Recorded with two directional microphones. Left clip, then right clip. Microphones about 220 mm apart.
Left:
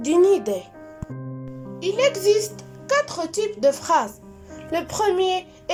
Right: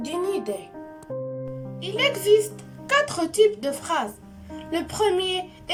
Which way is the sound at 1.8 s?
20° left (ahead or behind).